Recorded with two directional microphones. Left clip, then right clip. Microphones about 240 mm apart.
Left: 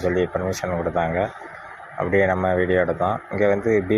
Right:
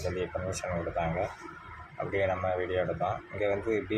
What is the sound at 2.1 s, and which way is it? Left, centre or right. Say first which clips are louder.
Speech: left 10 dB; centre.